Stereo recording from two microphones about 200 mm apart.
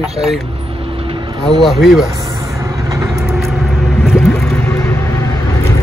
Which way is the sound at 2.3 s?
15° right (ahead or behind).